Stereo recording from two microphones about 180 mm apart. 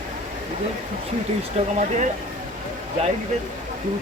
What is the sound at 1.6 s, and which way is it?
Speech, 35° right (ahead or behind).